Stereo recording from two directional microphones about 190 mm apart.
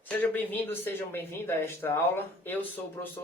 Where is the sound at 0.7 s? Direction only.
10° left (ahead or behind).